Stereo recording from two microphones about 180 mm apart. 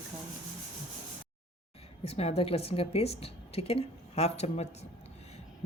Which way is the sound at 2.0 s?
35° left (ahead or behind).